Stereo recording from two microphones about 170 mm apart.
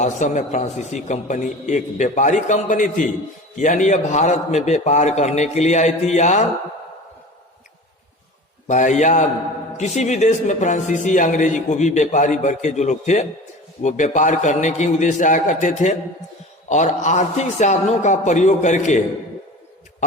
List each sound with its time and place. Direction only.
0.0 s a man's voice: 45° left (ahead or behind)
8.6 s a man's voice: 45° left (ahead or behind)